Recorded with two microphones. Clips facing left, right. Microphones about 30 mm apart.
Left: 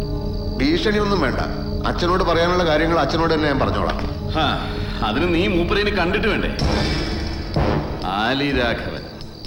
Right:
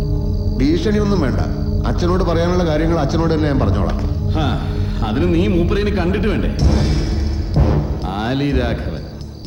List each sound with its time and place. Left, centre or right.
0.6 s speech: left
7.5 s music: left